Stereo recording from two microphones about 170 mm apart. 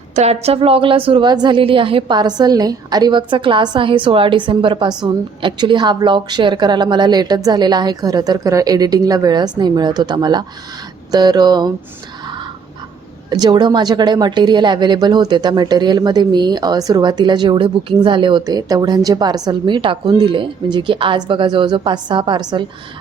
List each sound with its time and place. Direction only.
0.2 s a woman's voice: 40° right (ahead or behind)
13.3 s a woman's voice: 25° right (ahead or behind)